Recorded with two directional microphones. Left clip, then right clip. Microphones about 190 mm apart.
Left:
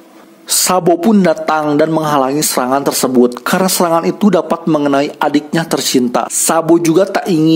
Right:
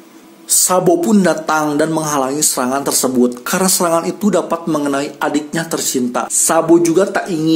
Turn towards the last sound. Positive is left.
turn(degrees=50)  # may be behind; listen again after turning